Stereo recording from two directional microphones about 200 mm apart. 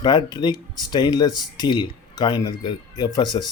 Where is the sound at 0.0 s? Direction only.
20° left (ahead or behind).